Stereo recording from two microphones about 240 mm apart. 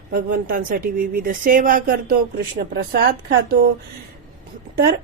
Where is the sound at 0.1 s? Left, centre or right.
Right.